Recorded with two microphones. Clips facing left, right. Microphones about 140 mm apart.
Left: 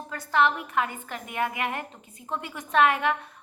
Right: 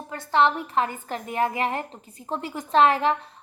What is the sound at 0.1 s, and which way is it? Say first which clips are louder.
A woman's voice: right 3 dB; 25° right (ahead or behind).